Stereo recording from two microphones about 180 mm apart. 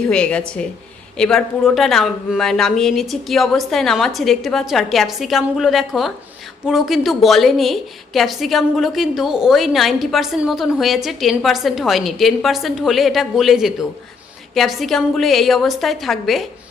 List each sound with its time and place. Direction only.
0.1 s a woman's voice: 5° left (ahead or behind)